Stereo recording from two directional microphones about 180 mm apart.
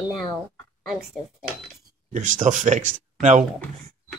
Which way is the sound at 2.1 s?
45° right (ahead or behind).